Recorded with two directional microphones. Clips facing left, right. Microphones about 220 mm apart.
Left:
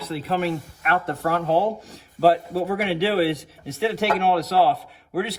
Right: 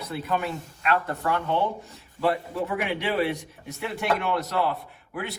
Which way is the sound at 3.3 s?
90° left.